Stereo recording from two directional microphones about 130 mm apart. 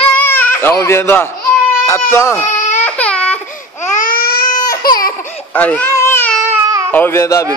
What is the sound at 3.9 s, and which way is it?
Baby cry, 90° left.